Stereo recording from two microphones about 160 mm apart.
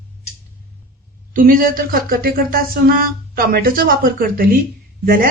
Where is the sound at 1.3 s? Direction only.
60° right (ahead or behind).